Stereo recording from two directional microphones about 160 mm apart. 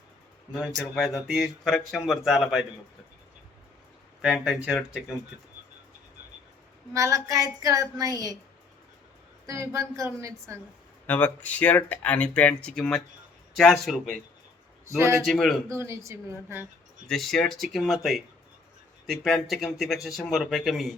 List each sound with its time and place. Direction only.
0.8 s speech: centre (ahead or behind)
4.2 s speech: centre (ahead or behind)
6.9 s a woman's voice: 20° right (ahead or behind)
9.5 s a woman's voice: 20° right (ahead or behind)
11.0 s speech: 10° left (ahead or behind)
14.8 s a woman's voice: 15° right (ahead or behind)
15.2 s speech: centre (ahead or behind)
15.7 s a woman's voice: 15° right (ahead or behind)
17.1 s speech: centre (ahead or behind)